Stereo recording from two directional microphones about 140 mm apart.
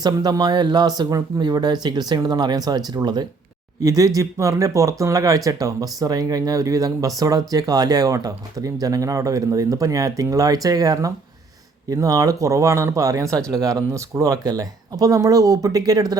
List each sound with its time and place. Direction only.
0.0 s speech: 30° right (ahead or behind)